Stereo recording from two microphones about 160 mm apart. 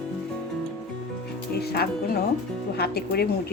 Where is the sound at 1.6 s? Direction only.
80° left.